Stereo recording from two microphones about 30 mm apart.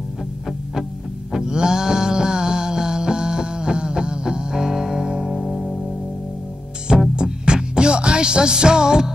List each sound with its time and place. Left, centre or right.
1.3 s music: right
5.2 s music: centre
5.5 s music: centre
7.2 s music: right